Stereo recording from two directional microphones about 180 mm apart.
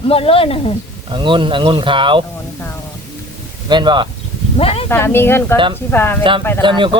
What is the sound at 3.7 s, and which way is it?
Speech, 25° right (ahead or behind).